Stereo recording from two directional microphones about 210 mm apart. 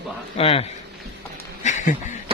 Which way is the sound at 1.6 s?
35° left (ahead or behind).